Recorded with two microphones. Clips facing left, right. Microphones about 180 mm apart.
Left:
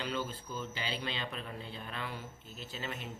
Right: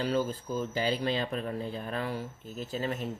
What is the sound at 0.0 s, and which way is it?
Speech, 40° right (ahead or behind).